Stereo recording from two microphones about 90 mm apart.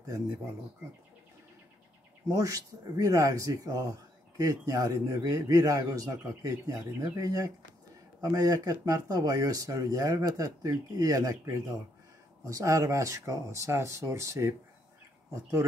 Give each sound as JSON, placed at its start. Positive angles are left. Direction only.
{"t": 2.2, "sound": "speech", "side_deg": -40}